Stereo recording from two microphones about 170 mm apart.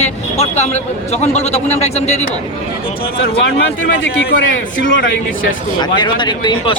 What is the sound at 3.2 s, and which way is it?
Speech, 65° left (ahead or behind).